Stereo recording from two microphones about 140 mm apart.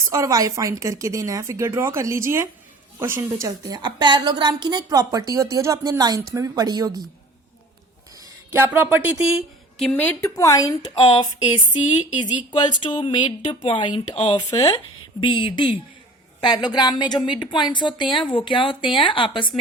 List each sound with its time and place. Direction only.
0.0 s a woman's voice: 20° right (ahead or behind)
8.5 s speech: 15° right (ahead or behind)
9.7 s speech: 10° left (ahead or behind); by 11.3 s 25° left (ahead or behind)
11.3 s a sound: 55° left (ahead or behind)
12.8 s a woman's voice: 35° left (ahead or behind)